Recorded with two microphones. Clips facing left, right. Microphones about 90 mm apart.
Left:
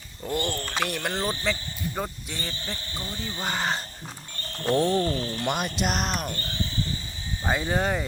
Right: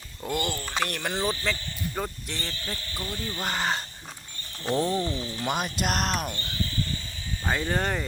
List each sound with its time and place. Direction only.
0.3 s speech: 40° left (ahead or behind)
0.8 s speech: centre (ahead or behind)
2.5 s speech: 25° left (ahead or behind)
3.4 s speech: centre (ahead or behind)
4.4 s a sound: 55° left (ahead or behind)
4.9 s speech: 50° left (ahead or behind)
5.4 s speech: centre (ahead or behind)
6.4 s a sound: 30° left (ahead or behind)
7.4 s speech: 10° left (ahead or behind)